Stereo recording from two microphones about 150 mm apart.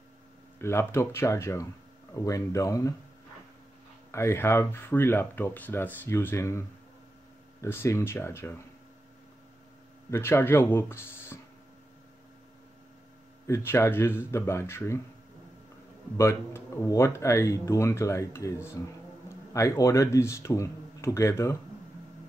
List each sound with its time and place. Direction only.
0.6 s speech: 15° left (ahead or behind)
4.1 s speech: 20° left (ahead or behind)
7.6 s speech: 15° left (ahead or behind)
10.1 s speech: 15° left (ahead or behind)
13.5 s speech: 15° left (ahead or behind)
16.2 s speech: 20° left (ahead or behind)